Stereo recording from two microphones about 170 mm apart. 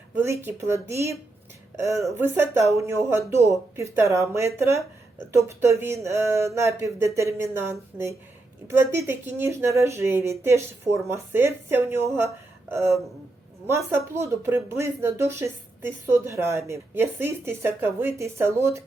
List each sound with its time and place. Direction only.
0.2 s speech: 15° right (ahead or behind)